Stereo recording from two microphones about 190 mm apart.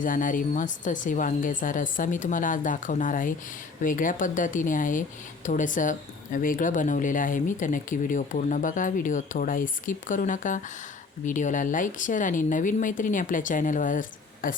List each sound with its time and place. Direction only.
0.0 s speech: 45° left (ahead or behind)